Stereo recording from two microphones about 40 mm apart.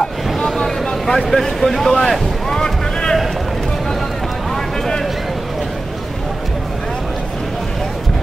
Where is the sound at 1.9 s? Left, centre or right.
Centre.